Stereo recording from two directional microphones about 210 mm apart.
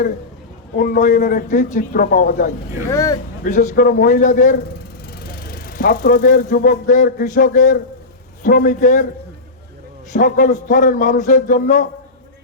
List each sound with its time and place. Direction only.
0.8 s a man's voice: 40° left (ahead or behind)
2.9 s speech: 15° left (ahead or behind)
3.4 s a man's voice: 40° left (ahead or behind)
10.1 s a man's voice: 40° left (ahead or behind)